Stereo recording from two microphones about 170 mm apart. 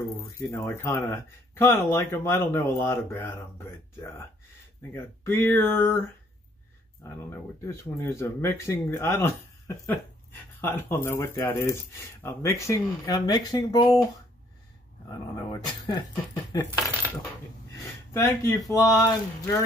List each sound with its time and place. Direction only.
0.4 s speech: 15° left (ahead or behind)
15.0 s speech: 25° left (ahead or behind)
18.1 s speech: 15° left (ahead or behind)